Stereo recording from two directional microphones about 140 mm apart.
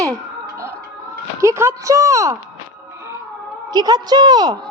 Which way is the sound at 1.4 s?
20° right (ahead or behind).